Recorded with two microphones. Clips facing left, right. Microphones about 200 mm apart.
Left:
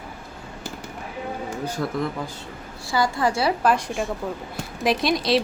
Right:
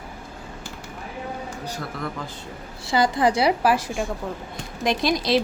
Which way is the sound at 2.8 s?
20° right (ahead or behind).